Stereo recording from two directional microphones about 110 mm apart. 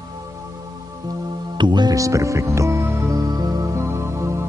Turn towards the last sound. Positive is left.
turn(degrees=-25)  # may be behind; listen again after turning